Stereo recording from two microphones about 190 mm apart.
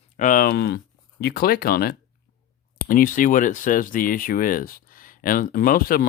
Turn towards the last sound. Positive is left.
turn(degrees=50)  # may be behind; listen again after turning